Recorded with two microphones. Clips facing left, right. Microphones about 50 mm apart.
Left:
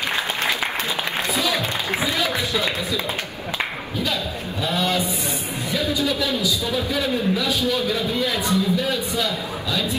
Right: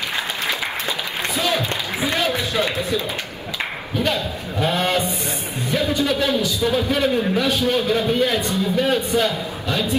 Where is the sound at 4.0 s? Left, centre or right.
Right.